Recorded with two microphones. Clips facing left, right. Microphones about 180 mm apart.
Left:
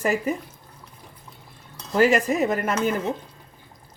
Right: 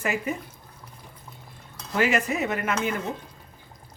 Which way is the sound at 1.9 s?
40° left (ahead or behind).